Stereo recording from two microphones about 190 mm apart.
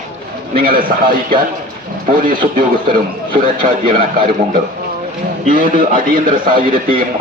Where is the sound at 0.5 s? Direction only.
50° right (ahead or behind).